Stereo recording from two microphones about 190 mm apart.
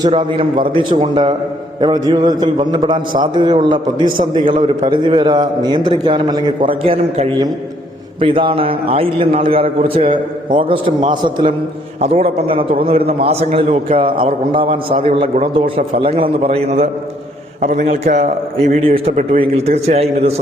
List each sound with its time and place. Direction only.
0.0 s a man's voice: 25° right (ahead or behind); by 18.2 s 40° right (ahead or behind)
18.7 s a man's voice: 30° right (ahead or behind)